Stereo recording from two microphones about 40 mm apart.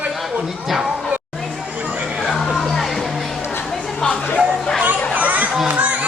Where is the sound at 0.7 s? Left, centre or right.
Centre.